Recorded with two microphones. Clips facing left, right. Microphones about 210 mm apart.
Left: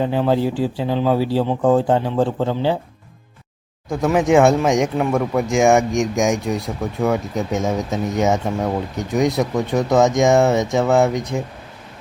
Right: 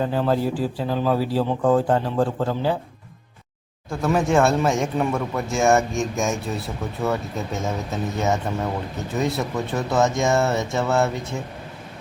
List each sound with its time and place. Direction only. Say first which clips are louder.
0.3 s speech: left 3 dB; 25° left (ahead or behind)
2.0 s a man's voice: left 3 dB; centre (ahead or behind)
2.4 s speech: left 3 dB; 25° left (ahead or behind)
3.8 s speech: left 4 dB; 15° left (ahead or behind)